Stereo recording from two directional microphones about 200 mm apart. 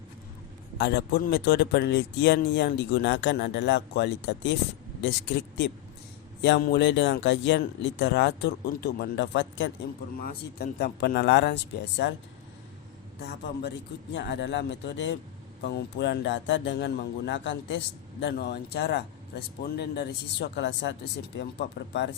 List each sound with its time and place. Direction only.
0.8 s speech: 50° left (ahead or behind)
6.4 s speech: 55° left (ahead or behind)
10.2 s speech: 55° left (ahead or behind)
13.1 s speech: 55° left (ahead or behind)